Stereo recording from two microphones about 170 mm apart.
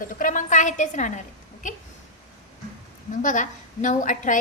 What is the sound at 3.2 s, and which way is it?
A woman's voice, 50° left (ahead or behind).